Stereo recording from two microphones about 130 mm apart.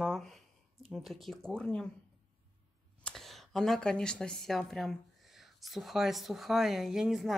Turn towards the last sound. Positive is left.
turn(degrees=0)  # may be behind; listen again after turning